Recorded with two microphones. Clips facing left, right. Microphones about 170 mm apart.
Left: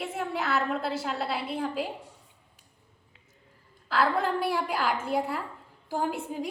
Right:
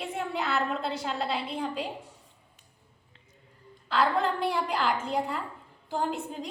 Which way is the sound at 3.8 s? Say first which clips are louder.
Even; 5° left (ahead or behind).